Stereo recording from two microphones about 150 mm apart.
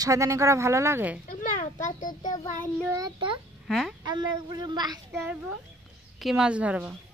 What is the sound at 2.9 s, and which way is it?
Speech, 30° right (ahead or behind).